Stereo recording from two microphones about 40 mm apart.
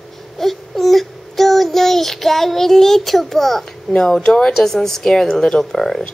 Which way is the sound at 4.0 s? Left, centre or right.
Centre.